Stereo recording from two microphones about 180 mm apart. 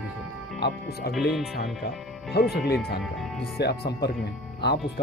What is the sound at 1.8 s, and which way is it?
Speech, 65° left (ahead or behind).